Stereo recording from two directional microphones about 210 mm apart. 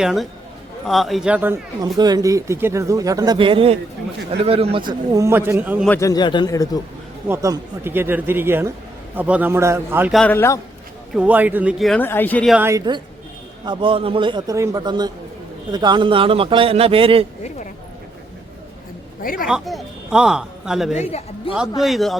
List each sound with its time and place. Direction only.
0.0 s speech: centre (ahead or behind)
2.0 s speech: 20° right (ahead or behind)
5.9 s a man's voice: 15° left (ahead or behind)
7.3 s speech: 15° right (ahead or behind)
10.2 s a man's voice: 10° left (ahead or behind)
11.1 s speech: 5° right (ahead or behind)
12.5 s a man's voice: 15° right (ahead or behind)
19.2 s a man's voice: 40° left (ahead or behind)
19.5 s speech: centre (ahead or behind)
20.9 s a man's voice: 30° left (ahead or behind)
21.8 s speech: centre (ahead or behind)